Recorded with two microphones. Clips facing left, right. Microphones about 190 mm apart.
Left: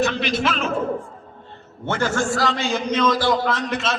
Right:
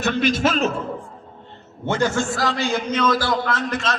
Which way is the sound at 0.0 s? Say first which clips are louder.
Right 2 dB; 50° right (ahead or behind).